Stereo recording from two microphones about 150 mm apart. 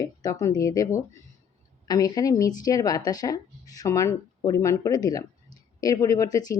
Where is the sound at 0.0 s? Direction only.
25° left (ahead or behind).